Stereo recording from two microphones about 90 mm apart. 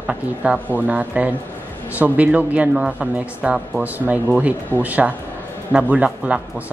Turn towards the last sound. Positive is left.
turn(degrees=-15)  # may be behind; listen again after turning